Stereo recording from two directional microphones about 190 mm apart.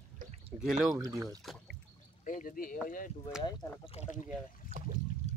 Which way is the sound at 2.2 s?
45° left (ahead or behind).